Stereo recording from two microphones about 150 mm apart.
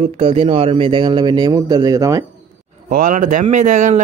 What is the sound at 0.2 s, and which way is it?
Speech, 40° right (ahead or behind).